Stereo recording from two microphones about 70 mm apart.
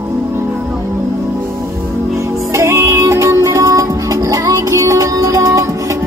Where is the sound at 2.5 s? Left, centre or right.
Right.